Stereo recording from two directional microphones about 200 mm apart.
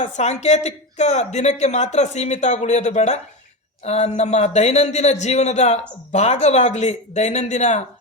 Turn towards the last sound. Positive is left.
turn(degrees=35)  # may be behind; listen again after turning